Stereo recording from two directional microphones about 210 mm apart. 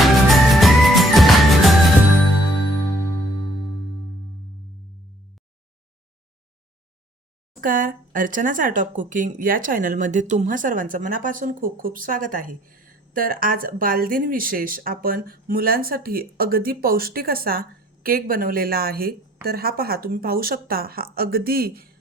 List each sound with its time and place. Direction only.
0.0 s music: centre (ahead or behind)
7.6 s speech: 40° right (ahead or behind)